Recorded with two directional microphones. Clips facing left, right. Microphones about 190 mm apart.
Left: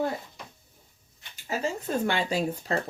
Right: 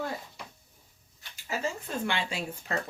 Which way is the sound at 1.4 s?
35° left (ahead or behind).